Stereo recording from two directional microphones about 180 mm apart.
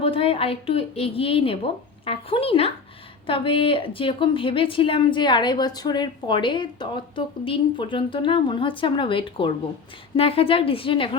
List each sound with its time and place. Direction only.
0.0 s a woman's voice: 30° left (ahead or behind)